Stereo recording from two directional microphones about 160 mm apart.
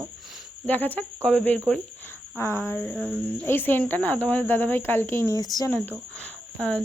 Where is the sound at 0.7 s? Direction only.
10° left (ahead or behind).